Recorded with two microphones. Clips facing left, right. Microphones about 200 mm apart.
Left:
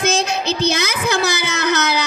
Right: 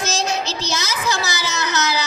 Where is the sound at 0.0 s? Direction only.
60° left (ahead or behind).